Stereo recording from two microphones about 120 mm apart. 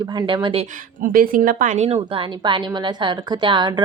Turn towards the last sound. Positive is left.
turn(degrees=-40)  # may be behind; listen again after turning